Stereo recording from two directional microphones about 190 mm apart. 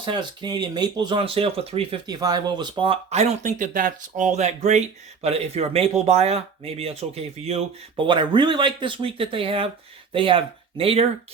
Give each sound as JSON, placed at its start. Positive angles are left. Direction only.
{"t": 0.0, "sound": "speech", "side_deg": -25}